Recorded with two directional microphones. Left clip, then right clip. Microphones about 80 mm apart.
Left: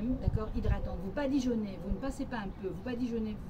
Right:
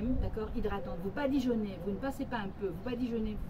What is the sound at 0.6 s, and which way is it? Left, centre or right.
A woman's voice, centre.